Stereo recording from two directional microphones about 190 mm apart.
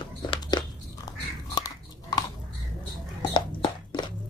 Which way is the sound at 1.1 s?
20° left (ahead or behind).